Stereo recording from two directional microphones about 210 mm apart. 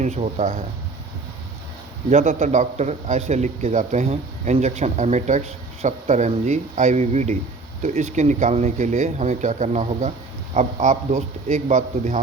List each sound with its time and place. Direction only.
0.0 s a man's voice: 35° right (ahead or behind)
2.0 s a man's voice: 30° right (ahead or behind)